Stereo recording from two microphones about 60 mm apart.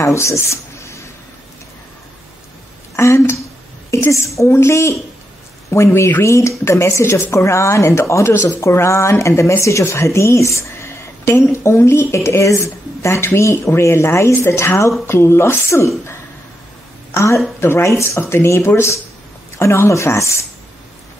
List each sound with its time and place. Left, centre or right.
0.0 s writing: left
3.0 s a woman's voice: left
17.1 s a woman's voice: left
19.9 s a woman's voice: left